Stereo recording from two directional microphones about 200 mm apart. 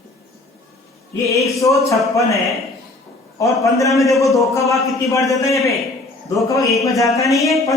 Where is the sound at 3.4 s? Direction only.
15° left (ahead or behind).